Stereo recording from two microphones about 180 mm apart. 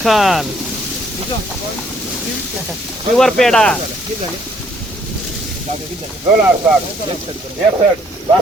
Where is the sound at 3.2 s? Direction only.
Centre (ahead or behind).